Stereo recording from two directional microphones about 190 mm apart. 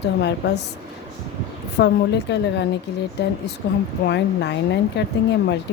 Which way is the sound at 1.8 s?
65° left (ahead or behind).